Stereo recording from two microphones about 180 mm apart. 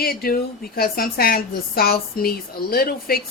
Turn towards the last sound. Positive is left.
turn(degrees=55)  # may be behind; listen again after turning